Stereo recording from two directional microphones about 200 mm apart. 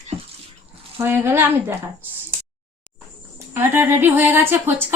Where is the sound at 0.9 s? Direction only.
10° right (ahead or behind).